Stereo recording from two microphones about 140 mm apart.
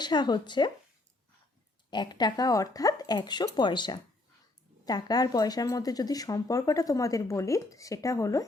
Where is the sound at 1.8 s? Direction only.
30° left (ahead or behind).